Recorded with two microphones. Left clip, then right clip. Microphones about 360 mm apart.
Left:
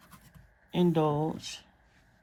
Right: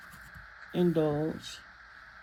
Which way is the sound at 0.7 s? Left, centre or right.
Left.